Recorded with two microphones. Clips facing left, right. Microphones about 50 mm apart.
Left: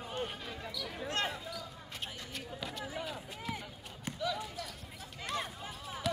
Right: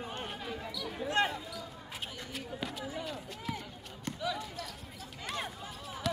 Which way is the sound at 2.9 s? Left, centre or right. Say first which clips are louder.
Right 1 dB; centre.